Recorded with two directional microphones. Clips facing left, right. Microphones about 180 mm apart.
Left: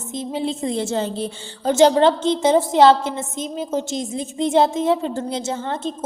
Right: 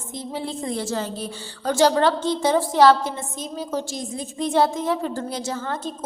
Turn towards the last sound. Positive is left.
turn(degrees=25)  # may be behind; listen again after turning